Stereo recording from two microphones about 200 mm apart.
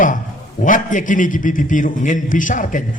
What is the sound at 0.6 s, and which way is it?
A man's voice, 40° left (ahead or behind).